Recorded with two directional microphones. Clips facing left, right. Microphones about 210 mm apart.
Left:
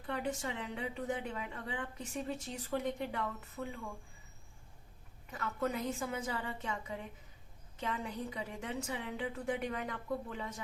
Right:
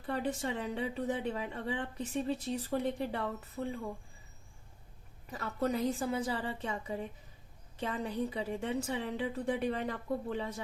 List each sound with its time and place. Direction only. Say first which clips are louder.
0.0 s a woman's voice: right 3 dB; 35° right (ahead or behind)
5.3 s a woman's voice: right 3 dB; 35° right (ahead or behind)